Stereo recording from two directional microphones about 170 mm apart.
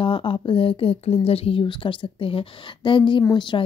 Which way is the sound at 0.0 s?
30° left (ahead or behind).